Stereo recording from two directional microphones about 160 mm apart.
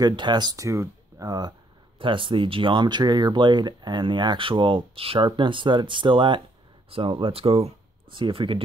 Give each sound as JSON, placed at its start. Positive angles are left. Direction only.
{"t": 0.0, "sound": "speech", "side_deg": -30}